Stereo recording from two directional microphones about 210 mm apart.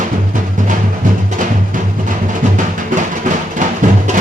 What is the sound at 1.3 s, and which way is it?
Music, 35° right (ahead or behind).